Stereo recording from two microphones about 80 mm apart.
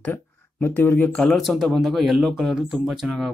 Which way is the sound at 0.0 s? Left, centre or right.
Left.